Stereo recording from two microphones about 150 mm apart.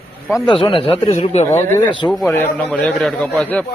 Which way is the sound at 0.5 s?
35° left (ahead or behind).